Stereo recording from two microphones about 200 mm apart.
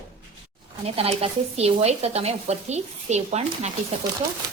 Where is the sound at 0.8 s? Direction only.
30° right (ahead or behind).